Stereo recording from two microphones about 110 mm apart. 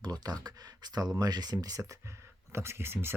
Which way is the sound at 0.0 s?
40° right (ahead or behind).